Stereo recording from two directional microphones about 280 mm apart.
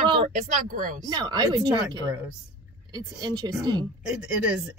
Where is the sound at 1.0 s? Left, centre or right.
Centre.